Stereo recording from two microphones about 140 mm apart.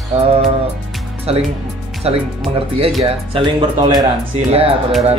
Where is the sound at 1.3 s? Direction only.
45° right (ahead or behind).